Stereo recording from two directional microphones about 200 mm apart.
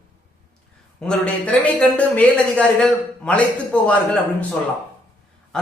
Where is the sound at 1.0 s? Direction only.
5° left (ahead or behind).